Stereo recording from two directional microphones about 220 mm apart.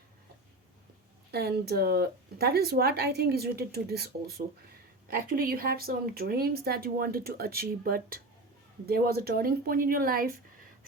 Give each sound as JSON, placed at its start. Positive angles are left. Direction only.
{"t": 1.3, "sound": "a woman's voice", "side_deg": -45}